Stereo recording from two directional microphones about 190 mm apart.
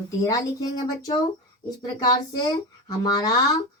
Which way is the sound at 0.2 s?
20° left (ahead or behind).